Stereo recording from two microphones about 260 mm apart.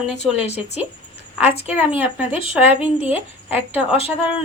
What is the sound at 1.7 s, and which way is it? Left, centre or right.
A woman's voice, centre.